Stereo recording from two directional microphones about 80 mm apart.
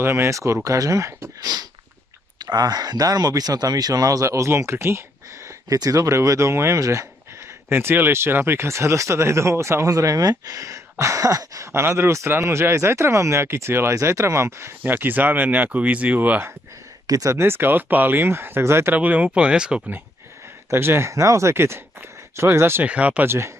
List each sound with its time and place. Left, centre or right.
0.0 s speech: right
2.3 s speech: right
5.7 s speech: right
7.7 s speech: right
14.8 s speech: right
17.0 s speech: right
17.4 s speech: right
18.9 s speech: right
20.7 s speech: right
22.8 s speech: centre
23.2 s speech: right